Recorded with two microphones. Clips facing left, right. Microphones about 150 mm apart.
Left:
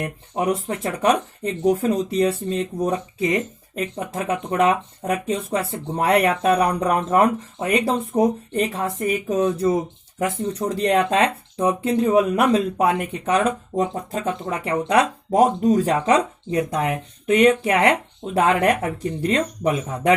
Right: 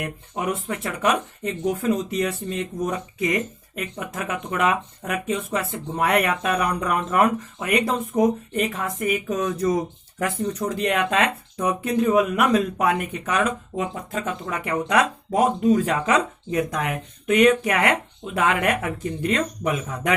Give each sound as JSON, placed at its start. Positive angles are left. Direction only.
{"t": 0.0, "sound": "speech", "side_deg": 35}